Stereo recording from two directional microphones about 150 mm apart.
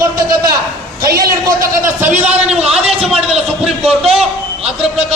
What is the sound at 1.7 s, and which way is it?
Speech, 15° right (ahead or behind).